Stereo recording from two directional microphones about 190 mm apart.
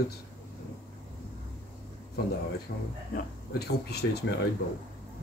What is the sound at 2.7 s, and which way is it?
Speech, 50° left (ahead or behind).